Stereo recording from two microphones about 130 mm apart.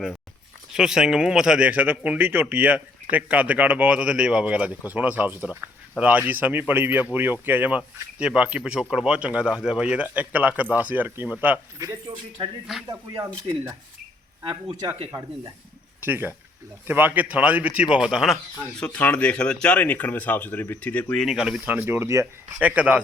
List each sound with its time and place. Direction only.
0.7 s a man's voice: 5° right (ahead or behind)
12.9 s speech: 40° right (ahead or behind)
16.0 s a man's voice: 15° right (ahead or behind)
18.8 s speech: 10° left (ahead or behind); by 21.7 s 5° right (ahead or behind)
21.7 s speech: 15° right (ahead or behind)
22.5 s a man's voice: 10° right (ahead or behind)